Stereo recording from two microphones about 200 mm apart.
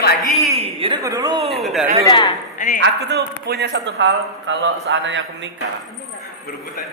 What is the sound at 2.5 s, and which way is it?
Speech, 40° left (ahead or behind).